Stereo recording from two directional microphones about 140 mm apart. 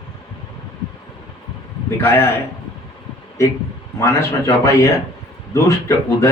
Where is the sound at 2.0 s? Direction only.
15° left (ahead or behind).